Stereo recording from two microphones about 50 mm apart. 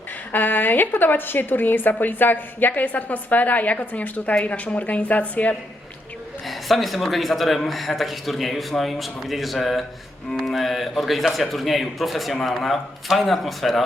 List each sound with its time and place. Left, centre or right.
0.3 s a woman's voice: left
6.5 s a man's voice: centre